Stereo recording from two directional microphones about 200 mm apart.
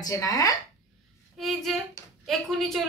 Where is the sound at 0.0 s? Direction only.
15° left (ahead or behind).